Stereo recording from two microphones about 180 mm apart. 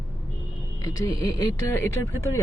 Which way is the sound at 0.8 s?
20° left (ahead or behind).